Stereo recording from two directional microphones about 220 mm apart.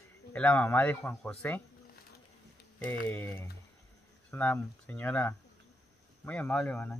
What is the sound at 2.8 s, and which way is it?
A man's voice, 10° left (ahead or behind).